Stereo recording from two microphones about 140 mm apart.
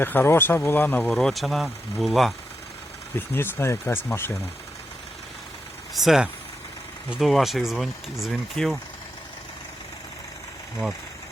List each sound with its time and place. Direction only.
0.0 s speech: 15° left (ahead or behind)
3.2 s speech: 15° left (ahead or behind)
5.9 s speech: centre (ahead or behind)